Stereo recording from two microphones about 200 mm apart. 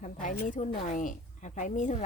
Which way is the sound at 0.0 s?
40° left (ahead or behind).